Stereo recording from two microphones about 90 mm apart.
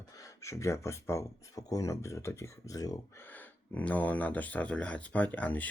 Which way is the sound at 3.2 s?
20° left (ahead or behind).